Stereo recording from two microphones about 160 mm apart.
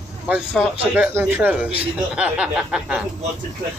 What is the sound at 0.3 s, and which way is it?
Speech, 5° right (ahead or behind).